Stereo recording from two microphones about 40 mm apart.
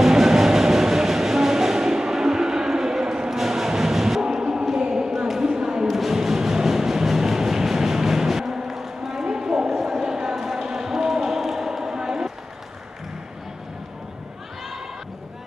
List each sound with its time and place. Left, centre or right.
0.0 s train: centre
5.3 s a sound: centre
5.9 s music: centre
9.7 s basketball bounce: centre